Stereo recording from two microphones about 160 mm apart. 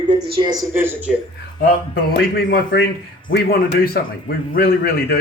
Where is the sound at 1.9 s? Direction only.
85° left.